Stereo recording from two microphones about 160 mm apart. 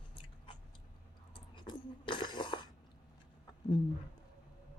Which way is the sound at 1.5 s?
30° left (ahead or behind).